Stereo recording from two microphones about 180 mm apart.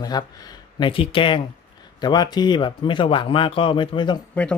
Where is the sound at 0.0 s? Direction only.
20° left (ahead or behind).